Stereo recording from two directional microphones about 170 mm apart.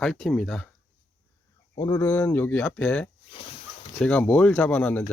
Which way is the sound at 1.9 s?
15° left (ahead or behind).